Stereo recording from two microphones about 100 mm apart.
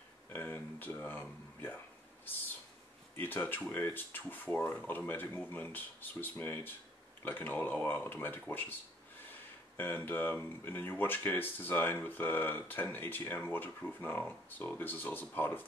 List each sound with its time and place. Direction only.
0.3 s a sound: 20° left (ahead or behind)
3.2 s speech: 20° left (ahead or behind)
9.8 s speech: 20° left (ahead or behind)